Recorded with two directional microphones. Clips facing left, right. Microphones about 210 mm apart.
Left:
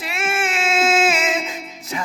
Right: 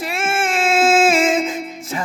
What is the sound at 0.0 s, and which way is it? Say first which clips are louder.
Music: right 3 dB; 50° right (ahead or behind).